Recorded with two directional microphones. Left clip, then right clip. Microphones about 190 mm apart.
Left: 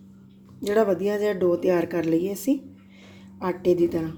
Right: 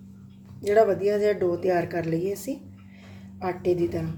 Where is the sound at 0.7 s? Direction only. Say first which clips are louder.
Right 2 dB; 35° left (ahead or behind).